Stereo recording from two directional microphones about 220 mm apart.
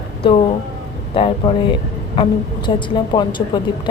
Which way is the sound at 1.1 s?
25° left (ahead or behind).